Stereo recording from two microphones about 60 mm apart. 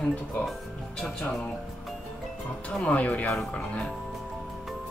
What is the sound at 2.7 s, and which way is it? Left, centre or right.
Speech, centre.